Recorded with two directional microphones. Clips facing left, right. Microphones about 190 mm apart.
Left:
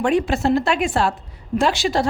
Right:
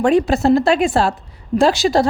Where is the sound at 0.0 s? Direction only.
35° right (ahead or behind).